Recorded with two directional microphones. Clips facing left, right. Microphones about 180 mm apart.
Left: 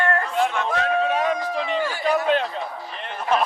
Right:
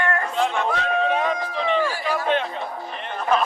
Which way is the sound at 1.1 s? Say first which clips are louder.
Left 1 dB; 40° left (ahead or behind).